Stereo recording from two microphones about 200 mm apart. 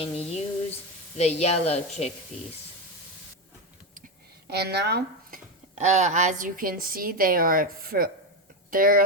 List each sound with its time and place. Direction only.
0.0 s a sound: 30° left (ahead or behind)
1.1 s a woman's voice: 35° left (ahead or behind)
4.4 s speech: 55° right (ahead or behind)
5.7 s a woman's voice: 35° right (ahead or behind)